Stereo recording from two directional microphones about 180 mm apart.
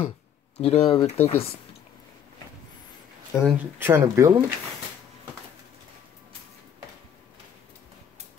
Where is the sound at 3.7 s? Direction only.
10° right (ahead or behind).